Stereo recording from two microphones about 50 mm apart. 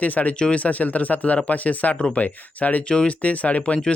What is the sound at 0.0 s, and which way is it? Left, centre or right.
Speech, left.